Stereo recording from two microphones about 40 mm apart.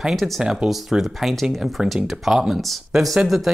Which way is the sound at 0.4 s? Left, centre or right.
Centre.